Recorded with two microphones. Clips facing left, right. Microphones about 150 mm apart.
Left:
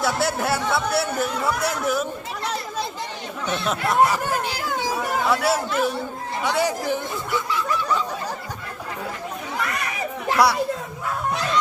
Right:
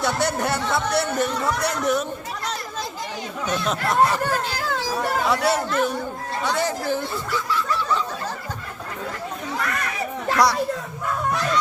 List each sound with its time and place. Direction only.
0.0 s speech: 5° left (ahead or behind)
3.7 s speech: 5° left (ahead or behind)
4.3 s a sound: 15° left (ahead or behind)
5.3 s speech: 5° left (ahead or behind)
10.2 s speech: 5° left (ahead or behind)